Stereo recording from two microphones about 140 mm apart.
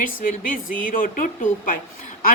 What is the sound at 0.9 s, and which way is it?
Speech, 80° left.